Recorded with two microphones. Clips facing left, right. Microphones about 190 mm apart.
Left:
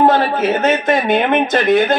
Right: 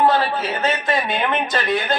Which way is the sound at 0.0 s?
45° left (ahead or behind).